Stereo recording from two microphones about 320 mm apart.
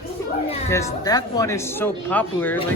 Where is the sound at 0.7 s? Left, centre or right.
Centre.